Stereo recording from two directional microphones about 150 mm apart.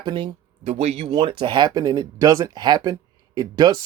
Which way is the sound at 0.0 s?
35° right (ahead or behind).